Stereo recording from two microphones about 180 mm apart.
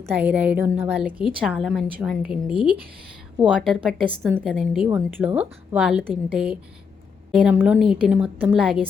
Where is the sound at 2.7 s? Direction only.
55° right (ahead or behind).